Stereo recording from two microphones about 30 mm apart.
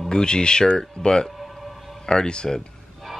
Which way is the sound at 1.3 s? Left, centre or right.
Centre.